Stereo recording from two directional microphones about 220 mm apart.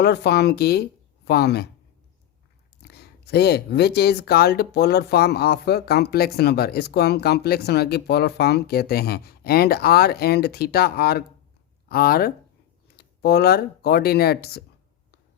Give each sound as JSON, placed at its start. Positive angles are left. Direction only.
{"t": 0.0, "sound": "speech", "side_deg": 50}
{"t": 2.8, "sound": "speech", "side_deg": 45}